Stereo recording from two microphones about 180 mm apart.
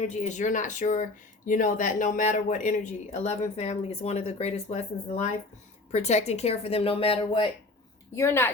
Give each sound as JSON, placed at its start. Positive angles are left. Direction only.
{"t": 0.0, "sound": "speech", "side_deg": 40}
{"t": 8.1, "sound": "speech", "side_deg": 15}